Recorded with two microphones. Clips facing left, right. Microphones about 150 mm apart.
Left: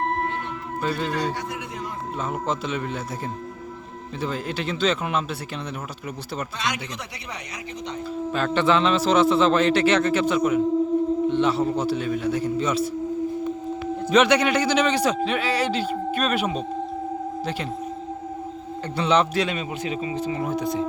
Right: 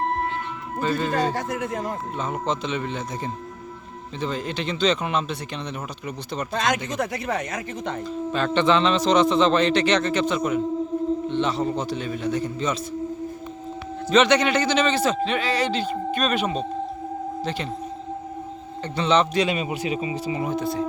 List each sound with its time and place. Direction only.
0.8 s speech: 5° left (ahead or behind)
1.1 s speech: 45° right (ahead or behind)
2.1 s speech: 5° left (ahead or behind)
6.5 s speech: 45° right (ahead or behind)
8.0 s a man's voice: 5° left (ahead or behind)
14.1 s a man's voice: 10° left (ahead or behind)
18.9 s a man's voice: 10° left (ahead or behind)
19.5 s speech: 10° right (ahead or behind)
20.5 s a man's voice: 15° left (ahead or behind)